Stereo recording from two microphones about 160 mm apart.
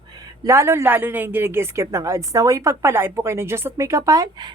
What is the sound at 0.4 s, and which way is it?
A woman's voice, 15° right (ahead or behind).